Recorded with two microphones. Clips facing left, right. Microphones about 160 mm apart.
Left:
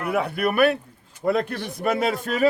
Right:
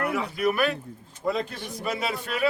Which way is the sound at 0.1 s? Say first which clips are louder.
Left 3 dB; 60° left (ahead or behind).